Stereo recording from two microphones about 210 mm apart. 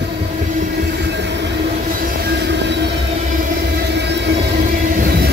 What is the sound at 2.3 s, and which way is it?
Train, 55° right (ahead or behind).